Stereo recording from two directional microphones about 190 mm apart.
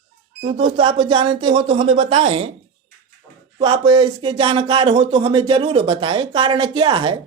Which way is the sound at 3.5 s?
30° right (ahead or behind).